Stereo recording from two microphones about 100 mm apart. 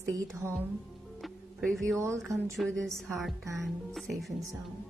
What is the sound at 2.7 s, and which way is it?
Speech, 5° left (ahead or behind).